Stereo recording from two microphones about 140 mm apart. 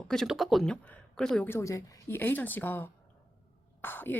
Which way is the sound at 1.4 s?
20° left (ahead or behind).